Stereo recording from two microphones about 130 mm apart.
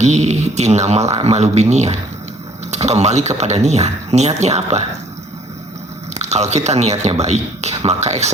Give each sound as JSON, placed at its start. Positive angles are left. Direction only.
{"t": 0.0, "sound": "speech", "side_deg": -60}
{"t": 6.1, "sound": "speech", "side_deg": -60}